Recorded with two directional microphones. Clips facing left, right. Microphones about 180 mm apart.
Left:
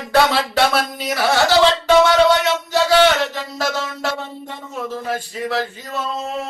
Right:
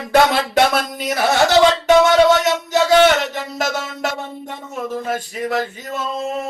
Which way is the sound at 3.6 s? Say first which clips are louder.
Even; 20° right (ahead or behind).